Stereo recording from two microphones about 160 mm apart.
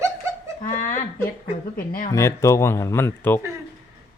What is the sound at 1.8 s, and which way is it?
Speech, 60° left (ahead or behind).